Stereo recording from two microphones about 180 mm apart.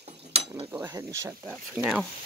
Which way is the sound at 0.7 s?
15° right (ahead or behind).